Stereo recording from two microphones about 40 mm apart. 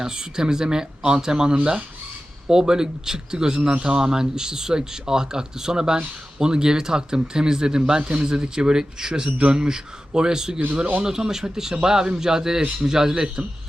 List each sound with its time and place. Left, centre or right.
0.0 s speech: centre